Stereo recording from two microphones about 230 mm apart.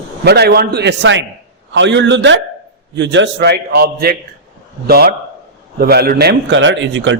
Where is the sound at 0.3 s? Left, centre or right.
Right.